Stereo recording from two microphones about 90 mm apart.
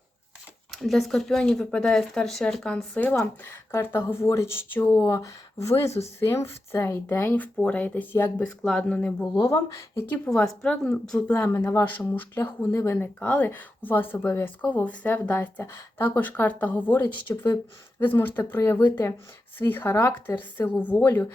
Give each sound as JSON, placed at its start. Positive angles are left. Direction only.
{"t": 0.7, "sound": "speech", "side_deg": 0}
{"t": 2.9, "sound": "speech", "side_deg": 20}
{"t": 3.2, "sound": "speech", "side_deg": 30}
{"t": 4.9, "sound": "speech", "side_deg": 35}
{"t": 9.6, "sound": "speech", "side_deg": 35}
{"t": 10.2, "sound": "speech", "side_deg": 5}